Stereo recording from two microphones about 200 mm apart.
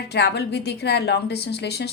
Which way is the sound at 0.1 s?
55° left (ahead or behind).